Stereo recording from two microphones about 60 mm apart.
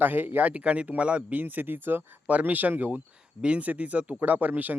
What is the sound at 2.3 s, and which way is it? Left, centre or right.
Speech, right.